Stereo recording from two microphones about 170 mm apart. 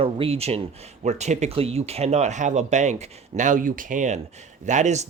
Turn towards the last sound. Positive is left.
turn(degrees=-45)  # may be behind; listen again after turning